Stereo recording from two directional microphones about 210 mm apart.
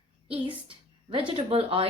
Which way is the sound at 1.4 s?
25° right (ahead or behind).